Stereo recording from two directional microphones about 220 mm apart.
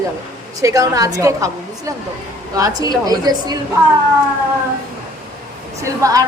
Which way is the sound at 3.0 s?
15° right (ahead or behind).